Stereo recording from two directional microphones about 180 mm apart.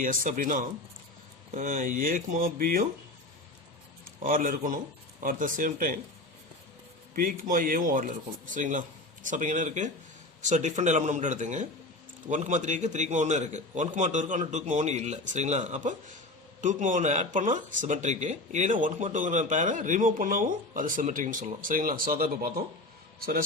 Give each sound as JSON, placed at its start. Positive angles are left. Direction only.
{"t": 0.0, "sound": "speech", "side_deg": -50}
{"t": 4.2, "sound": "speech", "side_deg": -50}
{"t": 7.2, "sound": "a man's voice", "side_deg": -50}